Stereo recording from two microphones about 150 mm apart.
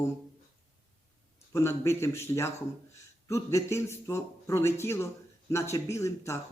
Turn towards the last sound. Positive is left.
turn(degrees=20)  # may be behind; listen again after turning